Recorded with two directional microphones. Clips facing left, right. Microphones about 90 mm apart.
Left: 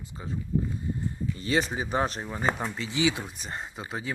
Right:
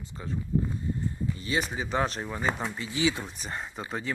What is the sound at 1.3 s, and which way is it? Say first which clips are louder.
Speech: left 6 dB; 35° left (ahead or behind).